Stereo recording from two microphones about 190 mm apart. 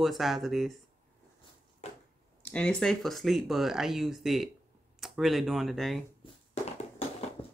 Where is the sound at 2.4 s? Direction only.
5° left (ahead or behind).